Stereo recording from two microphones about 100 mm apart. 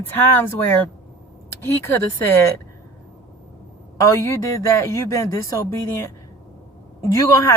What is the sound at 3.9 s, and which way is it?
A woman's voice, 30° left (ahead or behind).